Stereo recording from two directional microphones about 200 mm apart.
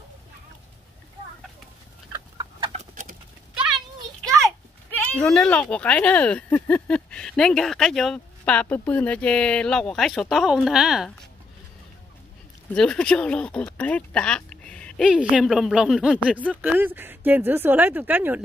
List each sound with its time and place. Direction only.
2.1 s chicken: 20° right (ahead or behind)
2.7 s a sound: 35° right (ahead or behind)
4.5 s speech: 5° left (ahead or behind)
12.7 s speech: 5° left (ahead or behind)